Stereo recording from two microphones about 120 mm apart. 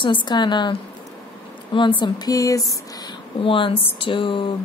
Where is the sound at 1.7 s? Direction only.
40° left (ahead or behind).